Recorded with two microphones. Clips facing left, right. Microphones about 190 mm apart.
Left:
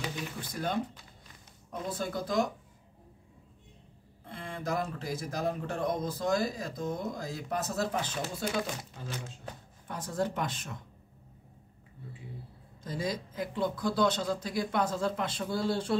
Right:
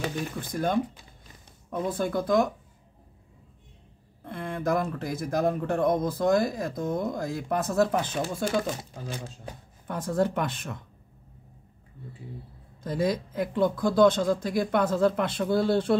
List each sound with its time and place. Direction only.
0.0 s speech: 50° right (ahead or behind)
4.2 s speech: 55° right (ahead or behind)
9.8 s speech: 55° right (ahead or behind)
12.8 s speech: 60° right (ahead or behind)